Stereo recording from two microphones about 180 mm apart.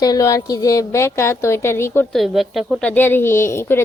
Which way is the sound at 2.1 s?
Centre (ahead or behind).